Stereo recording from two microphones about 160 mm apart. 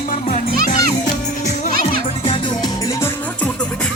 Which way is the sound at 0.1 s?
50° left (ahead or behind).